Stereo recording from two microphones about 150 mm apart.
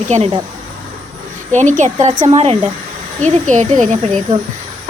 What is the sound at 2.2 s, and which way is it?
Speech, 40° right (ahead or behind).